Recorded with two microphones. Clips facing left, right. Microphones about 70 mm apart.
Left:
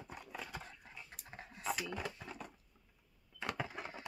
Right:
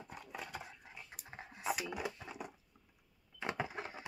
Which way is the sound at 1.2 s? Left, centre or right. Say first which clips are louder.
Right 2 dB; centre.